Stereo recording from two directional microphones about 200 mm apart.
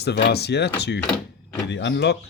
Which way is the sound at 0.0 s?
55° left (ahead or behind).